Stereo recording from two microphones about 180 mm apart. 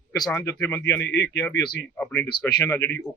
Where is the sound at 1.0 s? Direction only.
85° left.